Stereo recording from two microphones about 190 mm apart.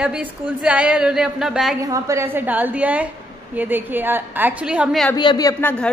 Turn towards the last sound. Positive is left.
turn(degrees=10)  # may be behind; listen again after turning